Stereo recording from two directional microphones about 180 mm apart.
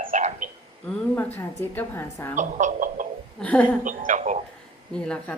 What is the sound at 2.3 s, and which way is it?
Speech, 45° right (ahead or behind).